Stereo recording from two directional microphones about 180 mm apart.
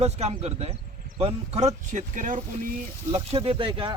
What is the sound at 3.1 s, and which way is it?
Speech, 30° right (ahead or behind).